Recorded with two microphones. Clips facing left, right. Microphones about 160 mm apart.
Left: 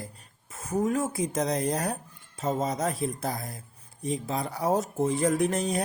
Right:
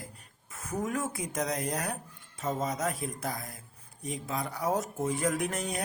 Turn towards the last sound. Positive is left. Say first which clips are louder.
# left 7 dB
turn(degrees=30)  # may be behind; listen again after turning